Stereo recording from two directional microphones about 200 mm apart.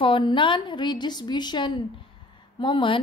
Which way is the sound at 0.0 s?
25° left (ahead or behind).